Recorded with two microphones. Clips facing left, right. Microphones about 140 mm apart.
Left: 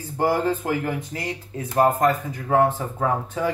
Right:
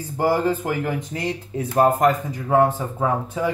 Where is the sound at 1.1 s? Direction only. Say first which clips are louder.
Right 4 dB; 25° right (ahead or behind).